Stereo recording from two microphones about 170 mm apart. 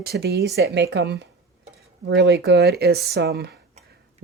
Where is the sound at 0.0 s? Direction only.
70° right (ahead or behind); by 1.3 s 90° right.